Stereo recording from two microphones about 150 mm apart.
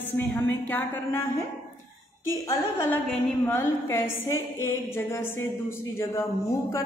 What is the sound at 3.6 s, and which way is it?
A woman's voice, 15° left (ahead or behind).